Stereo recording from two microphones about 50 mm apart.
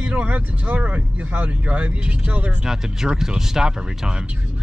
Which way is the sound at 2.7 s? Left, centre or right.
Centre.